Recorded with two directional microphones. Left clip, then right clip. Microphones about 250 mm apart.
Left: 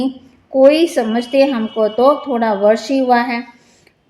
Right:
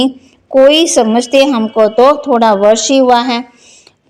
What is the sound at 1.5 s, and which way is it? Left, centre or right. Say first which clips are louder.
Speech: right 7 dB; right.